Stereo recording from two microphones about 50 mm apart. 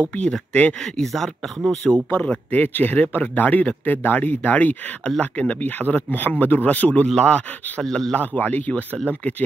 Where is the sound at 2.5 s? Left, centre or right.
Left.